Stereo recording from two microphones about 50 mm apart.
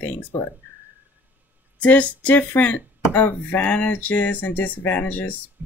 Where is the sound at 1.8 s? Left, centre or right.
Left.